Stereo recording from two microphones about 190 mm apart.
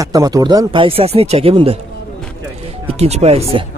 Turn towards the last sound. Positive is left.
turn(degrees=-35)  # may be behind; listen again after turning